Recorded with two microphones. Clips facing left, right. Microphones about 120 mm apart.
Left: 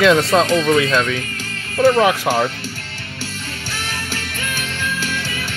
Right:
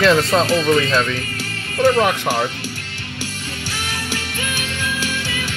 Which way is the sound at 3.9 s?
45° left (ahead or behind).